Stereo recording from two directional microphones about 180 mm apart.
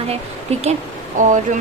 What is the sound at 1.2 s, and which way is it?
Speech, 45° right (ahead or behind).